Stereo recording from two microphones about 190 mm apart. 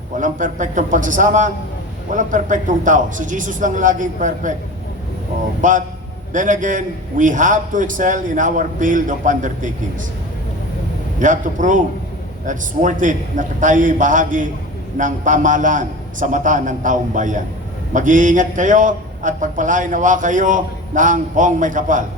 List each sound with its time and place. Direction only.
0.2 s a man's voice: 40° right (ahead or behind)
5.6 s a man's voice: 40° right (ahead or behind)
11.2 s a man's voice: 40° right (ahead or behind)